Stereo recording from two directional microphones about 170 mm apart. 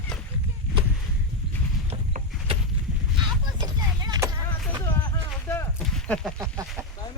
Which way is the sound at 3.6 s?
25° right (ahead or behind).